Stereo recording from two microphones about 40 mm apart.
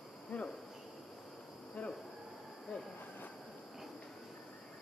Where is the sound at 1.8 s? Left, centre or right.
Left.